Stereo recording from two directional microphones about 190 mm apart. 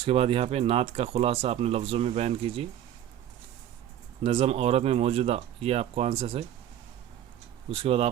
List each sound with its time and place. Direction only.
0.0 s speech: 30° right (ahead or behind)
4.2 s speech: 30° right (ahead or behind)
7.7 s speech: 30° right (ahead or behind)